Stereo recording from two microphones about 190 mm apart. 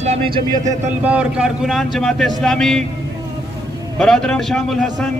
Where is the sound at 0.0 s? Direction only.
35° right (ahead or behind).